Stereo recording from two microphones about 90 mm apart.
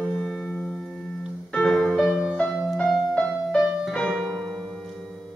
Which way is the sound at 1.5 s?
5° left (ahead or behind).